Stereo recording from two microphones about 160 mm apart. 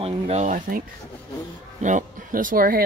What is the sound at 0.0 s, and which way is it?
Speech, 40° right (ahead or behind).